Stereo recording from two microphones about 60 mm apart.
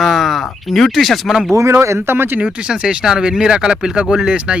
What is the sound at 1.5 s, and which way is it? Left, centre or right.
Speech, right.